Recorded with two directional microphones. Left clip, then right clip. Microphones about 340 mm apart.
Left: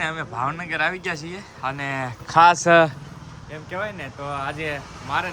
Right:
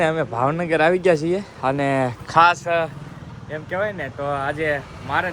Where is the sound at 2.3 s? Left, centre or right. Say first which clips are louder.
Left 1 dB; centre.